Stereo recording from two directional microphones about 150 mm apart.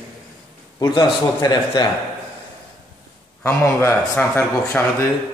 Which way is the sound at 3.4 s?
15° left (ahead or behind).